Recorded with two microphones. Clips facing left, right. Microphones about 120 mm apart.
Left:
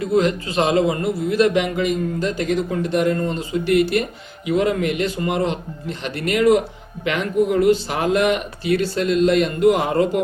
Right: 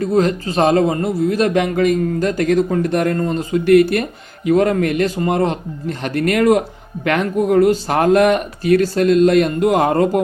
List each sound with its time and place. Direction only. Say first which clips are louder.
0.0 s a man's voice: right 2 dB; 40° right (ahead or behind)